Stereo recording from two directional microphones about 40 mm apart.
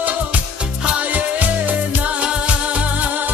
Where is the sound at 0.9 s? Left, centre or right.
Right.